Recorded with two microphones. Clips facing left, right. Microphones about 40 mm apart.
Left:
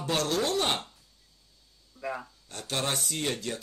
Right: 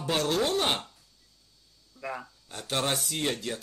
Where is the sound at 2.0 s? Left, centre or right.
Centre.